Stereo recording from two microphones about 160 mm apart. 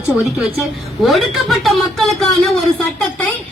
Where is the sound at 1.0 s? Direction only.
Centre (ahead or behind).